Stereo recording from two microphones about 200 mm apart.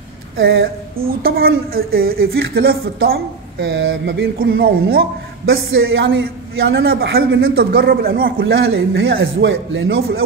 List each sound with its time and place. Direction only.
0.4 s a sound: 70° right (ahead or behind)
0.9 s a woman's voice: 50° right (ahead or behind)
5.4 s a man's voice: 80° right
6.0 s a woman's voice: 50° right (ahead or behind)
8.5 s a man's voice: 75° right (ahead or behind)